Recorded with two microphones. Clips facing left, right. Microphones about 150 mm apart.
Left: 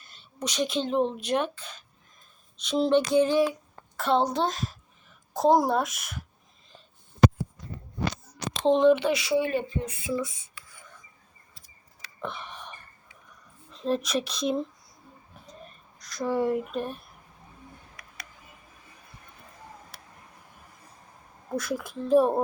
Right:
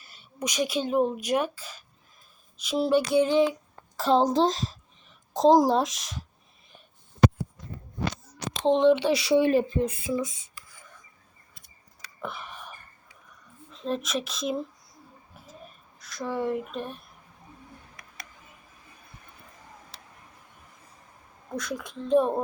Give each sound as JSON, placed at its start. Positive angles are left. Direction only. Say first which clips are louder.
{"t": 0.0, "sound": "speech", "louder": "right 1 dB", "side_deg": -10}
{"t": 2.6, "sound": "a sound", "louder": "left 1 dB", "side_deg": -5}
{"t": 4.0, "sound": "a woman's voice", "louder": "right 3 dB", "side_deg": -35}
{"t": 8.6, "sound": "speech", "louder": "even", "side_deg": -20}
{"t": 9.0, "sound": "a woman's voice", "louder": "right 3 dB", "side_deg": -30}
{"t": 10.1, "sound": "speech", "louder": "right 1 dB", "side_deg": -20}
{"t": 12.2, "sound": "a sound", "louder": "left 1 dB", "side_deg": 0}
{"t": 13.7, "sound": "speech", "louder": "left 3 dB", "side_deg": 0}
{"t": 15.4, "sound": "a sound", "louder": "even", "side_deg": -5}
{"t": 21.5, "sound": "speech", "louder": "left 3 dB", "side_deg": 5}